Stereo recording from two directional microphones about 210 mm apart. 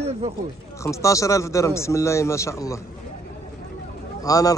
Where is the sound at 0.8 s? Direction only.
15° left (ahead or behind).